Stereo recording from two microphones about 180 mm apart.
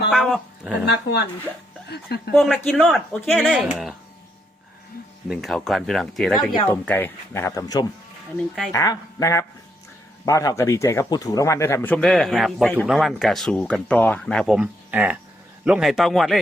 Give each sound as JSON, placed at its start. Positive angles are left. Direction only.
{"t": 0.1, "sound": "speech", "side_deg": 0}
{"t": 0.9, "sound": "speech", "side_deg": 70}
{"t": 2.3, "sound": "speech", "side_deg": 0}
{"t": 3.4, "sound": "speech", "side_deg": -5}
{"t": 5.3, "sound": "speech", "side_deg": 0}